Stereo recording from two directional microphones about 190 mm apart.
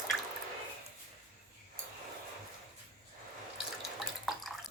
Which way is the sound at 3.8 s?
Centre (ahead or behind).